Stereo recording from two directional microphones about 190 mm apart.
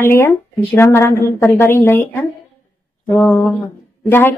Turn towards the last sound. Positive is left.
turn(degrees=10)  # may be behind; listen again after turning